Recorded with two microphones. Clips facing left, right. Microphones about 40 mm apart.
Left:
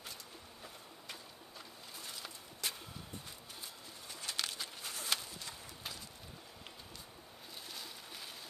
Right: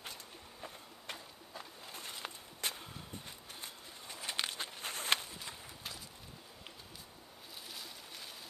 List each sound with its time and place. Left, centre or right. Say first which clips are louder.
2.0 s walk: right 3 dB; right
4.3 s walk: right 2 dB; right
4.8 s pigeon: right 5 dB; right
7.7 s a sound: even; centre